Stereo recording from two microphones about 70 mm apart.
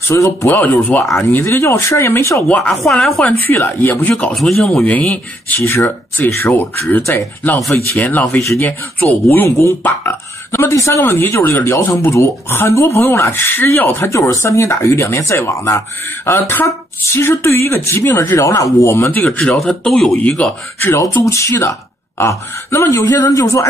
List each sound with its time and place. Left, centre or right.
0.1 s speech: left
0.5 s speech: left
2.4 s speech: centre
3.3 s speech: left
4.4 s speech: centre
4.8 s speech: centre; by 11.0 s left
11.0 s speech: left
14.1 s speech: left
18.4 s speech: left
19.0 s speech: left; by 20.2 s centre
20.2 s speech: centre
21.3 s speech: left